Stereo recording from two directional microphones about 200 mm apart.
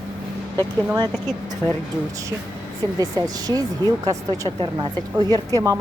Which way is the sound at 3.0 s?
20° right (ahead or behind).